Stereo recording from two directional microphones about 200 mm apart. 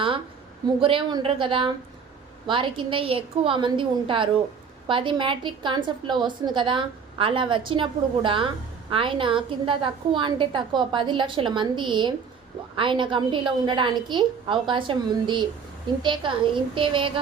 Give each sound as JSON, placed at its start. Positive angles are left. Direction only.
{"t": 0.8, "sound": "a woman's voice", "side_deg": -25}